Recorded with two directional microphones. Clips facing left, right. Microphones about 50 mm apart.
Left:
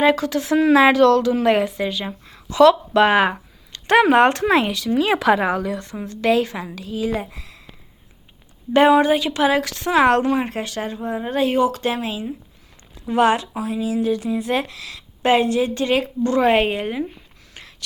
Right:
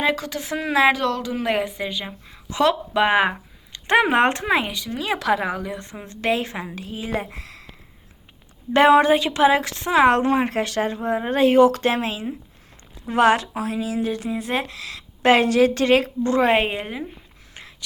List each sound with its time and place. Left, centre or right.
0.0 s a woman's voice: centre
2.5 s speech: centre
4.4 s speech: centre
4.9 s speech: centre
5.5 s a woman's voice: centre
5.7 s a woman's voice: right
8.7 s speech: right; by 10.2 s centre
10.2 s a woman's voice: right
15.4 s speech: right
16.2 s a woman's voice: right
16.8 s a woman's voice: centre
17.5 s a sound: centre